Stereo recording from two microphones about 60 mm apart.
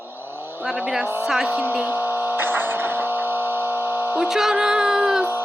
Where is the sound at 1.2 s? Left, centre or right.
Centre.